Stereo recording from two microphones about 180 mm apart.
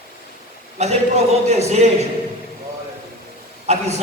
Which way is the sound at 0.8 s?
35° right (ahead or behind).